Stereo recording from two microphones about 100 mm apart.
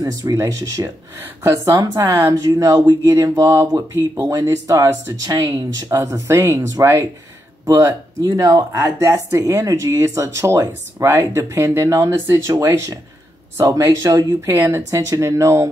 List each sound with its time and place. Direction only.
0.0 s speech: 35° right (ahead or behind)
8.7 s speech: 25° right (ahead or behind)